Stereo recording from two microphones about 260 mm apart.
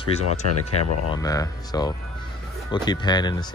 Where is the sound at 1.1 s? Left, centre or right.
Centre.